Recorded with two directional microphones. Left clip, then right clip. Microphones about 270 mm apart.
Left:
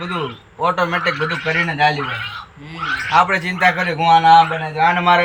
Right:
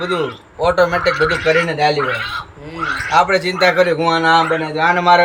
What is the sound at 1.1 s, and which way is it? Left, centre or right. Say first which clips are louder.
A woman's voice: right 5 dB; right.